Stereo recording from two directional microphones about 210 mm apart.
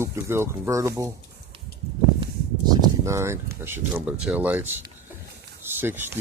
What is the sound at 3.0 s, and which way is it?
Speech, 15° right (ahead or behind).